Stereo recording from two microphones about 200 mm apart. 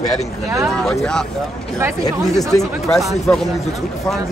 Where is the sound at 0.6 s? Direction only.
Centre (ahead or behind).